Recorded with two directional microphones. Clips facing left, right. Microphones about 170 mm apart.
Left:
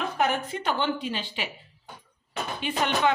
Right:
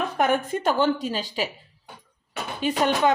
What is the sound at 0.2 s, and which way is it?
Speech, 50° right (ahead or behind).